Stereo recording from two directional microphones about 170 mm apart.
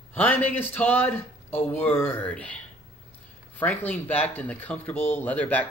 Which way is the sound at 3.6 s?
10° left (ahead or behind).